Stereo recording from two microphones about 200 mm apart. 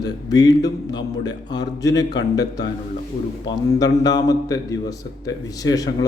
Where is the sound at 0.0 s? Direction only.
20° left (ahead or behind).